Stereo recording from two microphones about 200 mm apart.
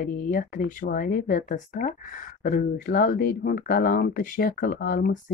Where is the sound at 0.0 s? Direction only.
45° left (ahead or behind).